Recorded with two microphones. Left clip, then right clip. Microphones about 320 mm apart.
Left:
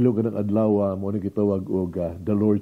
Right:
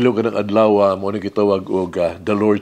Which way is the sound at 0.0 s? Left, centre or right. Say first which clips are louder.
Right 6 dB; centre.